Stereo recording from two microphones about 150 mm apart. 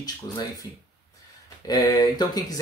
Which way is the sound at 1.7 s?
30° left (ahead or behind).